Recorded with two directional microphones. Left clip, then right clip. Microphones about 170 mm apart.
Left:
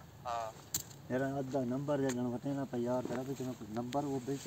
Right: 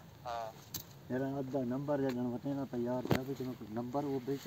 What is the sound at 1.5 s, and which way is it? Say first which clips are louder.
Speech: even; centre (ahead or behind).